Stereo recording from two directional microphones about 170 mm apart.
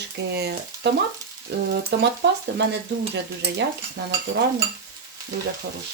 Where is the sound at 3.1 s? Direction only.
85° right.